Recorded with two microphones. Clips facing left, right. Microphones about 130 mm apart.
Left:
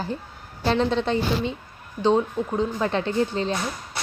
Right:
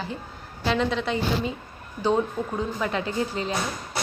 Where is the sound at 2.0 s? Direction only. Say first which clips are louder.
Left 3 dB; 20° left (ahead or behind).